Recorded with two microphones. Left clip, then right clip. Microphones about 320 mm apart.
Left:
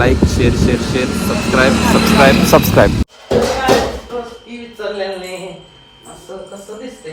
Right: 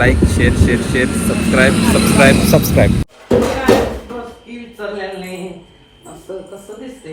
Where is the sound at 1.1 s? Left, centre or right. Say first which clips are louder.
Even; left.